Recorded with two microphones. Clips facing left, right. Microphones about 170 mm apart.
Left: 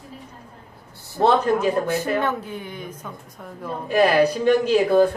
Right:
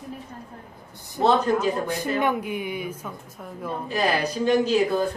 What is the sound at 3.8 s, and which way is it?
Speech, 60° left (ahead or behind).